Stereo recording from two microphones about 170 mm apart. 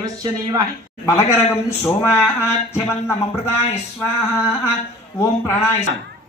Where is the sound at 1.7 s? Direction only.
15° left (ahead or behind).